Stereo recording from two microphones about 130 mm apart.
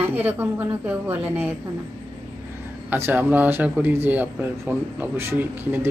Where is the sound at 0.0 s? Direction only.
15° right (ahead or behind).